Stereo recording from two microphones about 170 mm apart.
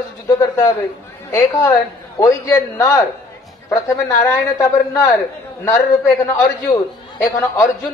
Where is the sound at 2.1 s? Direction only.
20° left (ahead or behind).